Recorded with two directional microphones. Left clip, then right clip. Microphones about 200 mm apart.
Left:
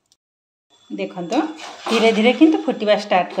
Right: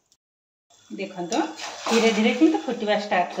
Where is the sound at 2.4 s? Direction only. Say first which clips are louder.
Left 6 dB; 45° left (ahead or behind).